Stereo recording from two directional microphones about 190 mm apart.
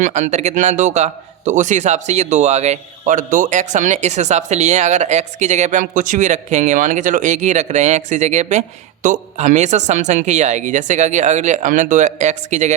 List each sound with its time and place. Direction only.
0.0 s a man's voice: 40° right (ahead or behind)